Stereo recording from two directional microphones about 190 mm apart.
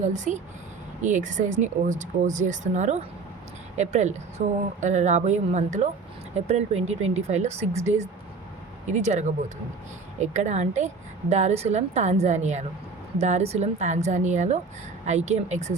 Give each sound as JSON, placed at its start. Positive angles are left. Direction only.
{"t": 0.0, "sound": "a woman's voice", "side_deg": -40}